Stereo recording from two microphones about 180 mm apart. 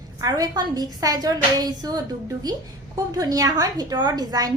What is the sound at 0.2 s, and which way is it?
A woman's voice, 20° right (ahead or behind).